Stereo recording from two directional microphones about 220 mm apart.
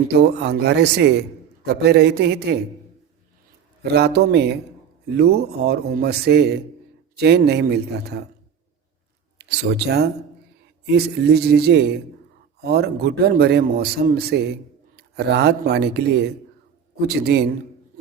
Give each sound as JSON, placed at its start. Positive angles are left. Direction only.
{"t": 0.1, "sound": "a man's voice", "side_deg": -50}
{"t": 3.8, "sound": "a man's voice", "side_deg": -50}
{"t": 9.4, "sound": "a man's voice", "side_deg": -50}